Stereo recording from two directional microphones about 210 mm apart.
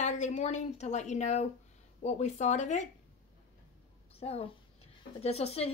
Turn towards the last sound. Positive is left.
turn(degrees=30)  # may be behind; listen again after turning